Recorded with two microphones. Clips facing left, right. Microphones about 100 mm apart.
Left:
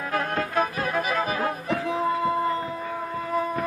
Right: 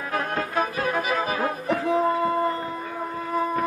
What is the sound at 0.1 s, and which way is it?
Music, 5° right (ahead or behind).